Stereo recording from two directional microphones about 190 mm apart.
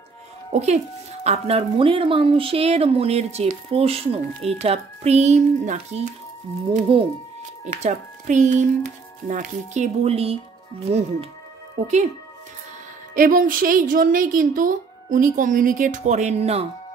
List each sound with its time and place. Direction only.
0.5 s speech: 35° right (ahead or behind)
13.1 s a woman's voice: 45° right (ahead or behind)